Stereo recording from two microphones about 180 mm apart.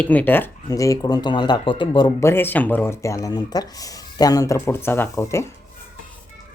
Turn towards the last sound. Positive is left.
turn(degrees=15)  # may be behind; listen again after turning